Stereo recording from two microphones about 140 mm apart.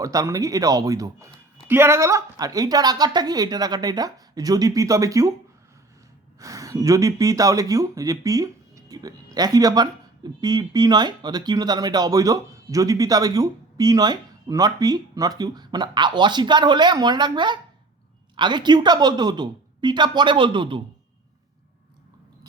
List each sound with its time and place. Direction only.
0.0 s speech: 25° right (ahead or behind)
6.4 s a woman's voice: 25° right (ahead or behind)